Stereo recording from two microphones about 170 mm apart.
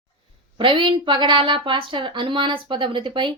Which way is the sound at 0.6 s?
30° right (ahead or behind).